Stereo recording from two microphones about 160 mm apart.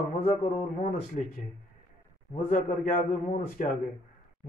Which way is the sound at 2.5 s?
55° left (ahead or behind).